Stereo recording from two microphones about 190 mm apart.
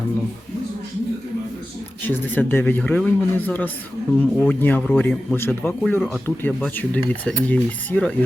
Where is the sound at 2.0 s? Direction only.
10° left (ahead or behind).